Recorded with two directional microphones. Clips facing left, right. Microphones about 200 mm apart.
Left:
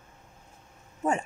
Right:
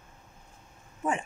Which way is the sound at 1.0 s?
40° left (ahead or behind).